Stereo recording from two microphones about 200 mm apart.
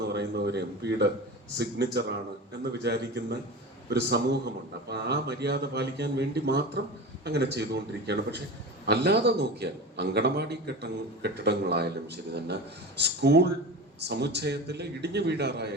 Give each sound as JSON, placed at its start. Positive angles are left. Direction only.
{"t": 0.0, "sound": "a man's voice", "side_deg": -55}